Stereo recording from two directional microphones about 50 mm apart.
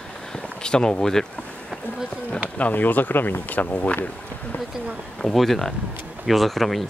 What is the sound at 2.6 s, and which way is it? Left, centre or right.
Speech, left.